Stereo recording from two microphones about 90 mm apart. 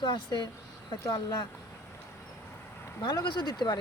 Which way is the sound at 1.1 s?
50° left (ahead or behind).